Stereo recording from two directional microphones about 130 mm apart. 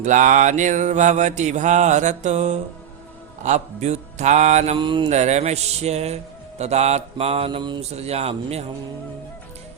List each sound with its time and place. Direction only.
0.0 s mantra: 75° right (ahead or behind)
4.8 s mantra: 40° right (ahead or behind)
5.0 s mantra: 60° right (ahead or behind); by 7.8 s 40° right (ahead or behind)
7.8 s mantra: 55° right (ahead or behind)